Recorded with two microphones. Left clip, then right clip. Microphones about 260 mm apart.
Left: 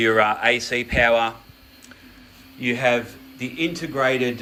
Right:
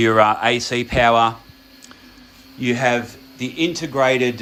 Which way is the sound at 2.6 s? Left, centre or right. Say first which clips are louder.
Right 2 dB; right.